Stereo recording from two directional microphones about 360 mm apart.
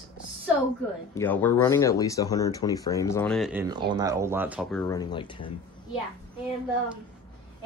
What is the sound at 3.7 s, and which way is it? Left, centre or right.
Speech, centre.